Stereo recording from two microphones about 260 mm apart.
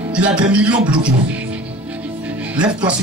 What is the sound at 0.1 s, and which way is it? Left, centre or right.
Music, centre.